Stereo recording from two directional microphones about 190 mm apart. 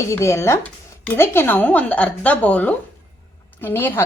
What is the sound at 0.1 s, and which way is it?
Speech, 15° left (ahead or behind).